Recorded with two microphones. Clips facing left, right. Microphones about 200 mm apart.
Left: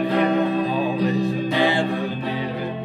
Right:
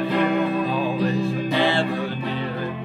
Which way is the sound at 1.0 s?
15° left (ahead or behind).